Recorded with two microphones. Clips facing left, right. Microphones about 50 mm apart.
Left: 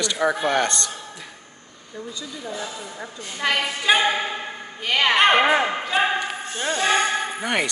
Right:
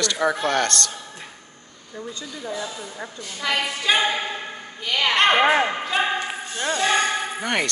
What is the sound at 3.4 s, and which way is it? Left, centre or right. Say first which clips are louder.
Speech: left 2 dB; left.